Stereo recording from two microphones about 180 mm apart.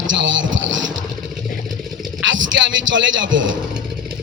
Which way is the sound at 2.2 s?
90° right.